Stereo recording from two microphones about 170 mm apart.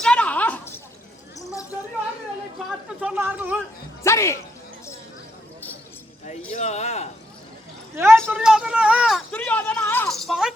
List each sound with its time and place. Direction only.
0.0 s a sound: 5° left (ahead or behind)
3.0 s speech: 10° right (ahead or behind)
4.0 s speech: 15° left (ahead or behind)
6.5 s a man's voice: 40° left (ahead or behind)
7.9 s speech: 15° right (ahead or behind); by 10.1 s 10° left (ahead or behind)
10.1 s a sound: centre (ahead or behind)